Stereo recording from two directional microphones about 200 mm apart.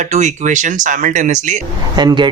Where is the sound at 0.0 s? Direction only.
35° right (ahead or behind).